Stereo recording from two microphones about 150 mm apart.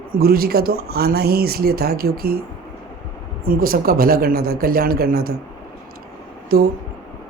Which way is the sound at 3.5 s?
75° right (ahead or behind).